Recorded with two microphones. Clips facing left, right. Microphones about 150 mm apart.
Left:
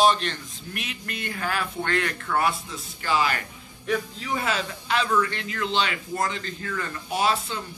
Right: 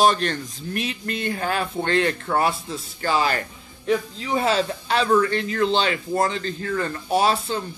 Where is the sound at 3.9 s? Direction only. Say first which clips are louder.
Right 5 dB; 20° right (ahead or behind).